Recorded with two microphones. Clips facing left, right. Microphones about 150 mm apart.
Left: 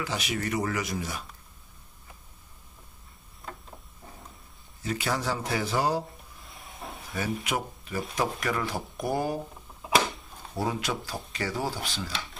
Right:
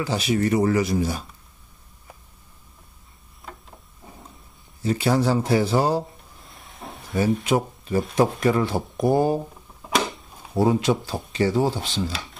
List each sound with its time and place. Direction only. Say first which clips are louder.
0.0 s speech: right 9 dB; 30° right (ahead or behind)
4.8 s speech: right 9 dB; 30° right (ahead or behind)
6.4 s hiss: right 2 dB; centre (ahead or behind)
7.4 s speech: right 9 dB; 30° right (ahead or behind)
9.8 s a sound: right 1 dB; centre (ahead or behind)
10.5 s speech: right 10 dB; 25° right (ahead or behind)
12.1 s speech: right 3 dB; centre (ahead or behind)